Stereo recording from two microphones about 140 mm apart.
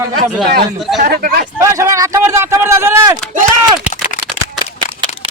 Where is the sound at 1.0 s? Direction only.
90° right.